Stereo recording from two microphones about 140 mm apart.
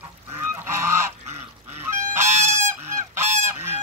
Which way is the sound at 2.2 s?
15° right (ahead or behind).